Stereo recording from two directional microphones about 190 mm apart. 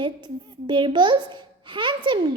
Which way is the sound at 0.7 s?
25° right (ahead or behind).